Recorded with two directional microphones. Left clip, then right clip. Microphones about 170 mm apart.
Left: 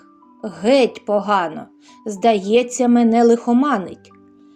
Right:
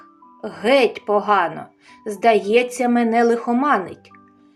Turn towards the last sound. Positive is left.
turn(degrees=30)  # may be behind; listen again after turning